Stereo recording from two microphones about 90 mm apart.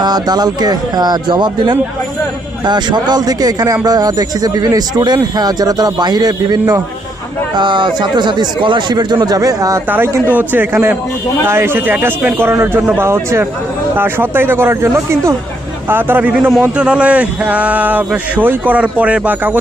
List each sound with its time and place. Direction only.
0.0 s a man's voice: 50° right (ahead or behind)
7.5 s speech: 60° right (ahead or behind); by 9.8 s 40° right (ahead or behind)
10.3 s a man's voice: 20° right (ahead or behind)
15.9 s a man's voice: 20° right (ahead or behind)